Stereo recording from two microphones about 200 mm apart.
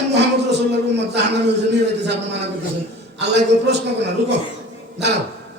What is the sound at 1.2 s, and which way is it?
A man's voice, 60° right (ahead or behind).